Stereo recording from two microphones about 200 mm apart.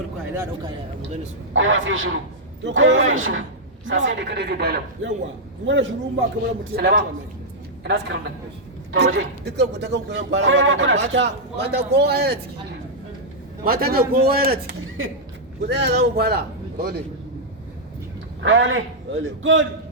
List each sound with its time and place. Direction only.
1.5 s a man's voice: 70° right (ahead or behind)
3.8 s speech: 70° right (ahead or behind); by 5.1 s 50° right (ahead or behind)
5.6 s a man's voice: 70° right (ahead or behind)
6.7 s speech: 50° right (ahead or behind)
13.7 s speech: 50° right (ahead or behind)
15.0 s a man's voice: 80° right
15.6 s speech: 60° right (ahead or behind)
18.4 s a man's voice: 70° right (ahead or behind)